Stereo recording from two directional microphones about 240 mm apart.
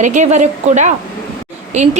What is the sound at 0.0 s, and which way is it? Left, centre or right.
A woman's voice, right.